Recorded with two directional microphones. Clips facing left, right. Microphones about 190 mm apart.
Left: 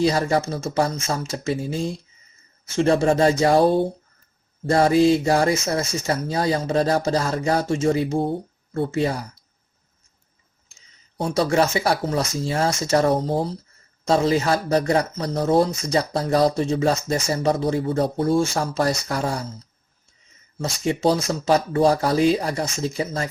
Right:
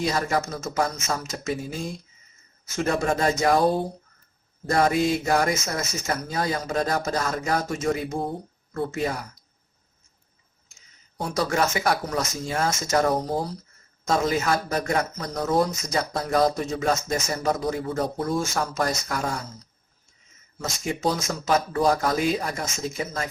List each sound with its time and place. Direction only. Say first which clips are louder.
0.0 s speech: left 5 dB; 30° left (ahead or behind)
11.2 s speech: left 5 dB; 30° left (ahead or behind)
20.6 s speech: left 6 dB; 30° left (ahead or behind)